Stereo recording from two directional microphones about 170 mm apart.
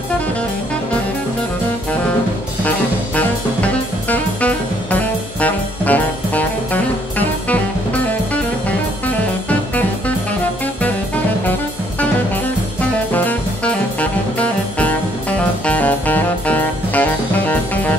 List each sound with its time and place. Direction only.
3.2 s music: 10° left (ahead or behind)
13.1 s music: 10° left (ahead or behind)